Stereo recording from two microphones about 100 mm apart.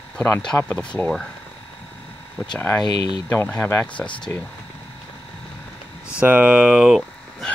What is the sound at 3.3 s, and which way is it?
Speech, 15° left (ahead or behind).